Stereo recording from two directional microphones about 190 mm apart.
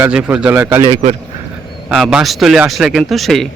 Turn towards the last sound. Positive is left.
turn(degrees=0)  # may be behind; listen again after turning